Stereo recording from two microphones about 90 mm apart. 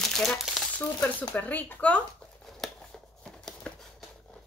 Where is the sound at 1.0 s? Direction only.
15° left (ahead or behind).